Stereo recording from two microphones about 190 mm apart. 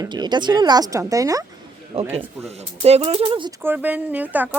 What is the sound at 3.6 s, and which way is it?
Speech, 10° right (ahead or behind).